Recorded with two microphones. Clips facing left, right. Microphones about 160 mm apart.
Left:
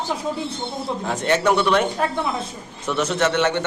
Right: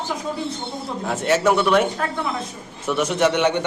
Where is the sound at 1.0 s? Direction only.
5° right (ahead or behind).